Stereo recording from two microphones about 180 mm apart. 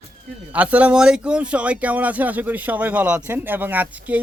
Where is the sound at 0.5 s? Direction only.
10° right (ahead or behind).